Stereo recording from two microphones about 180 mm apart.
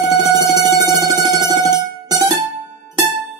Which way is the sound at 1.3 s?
20° right (ahead or behind).